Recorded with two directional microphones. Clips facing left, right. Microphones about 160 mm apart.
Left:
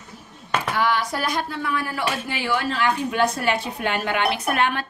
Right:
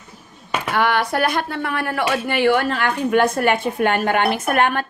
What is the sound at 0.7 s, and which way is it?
Speech, 65° right (ahead or behind).